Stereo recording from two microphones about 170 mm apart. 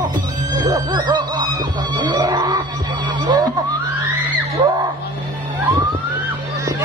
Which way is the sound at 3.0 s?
25° right (ahead or behind).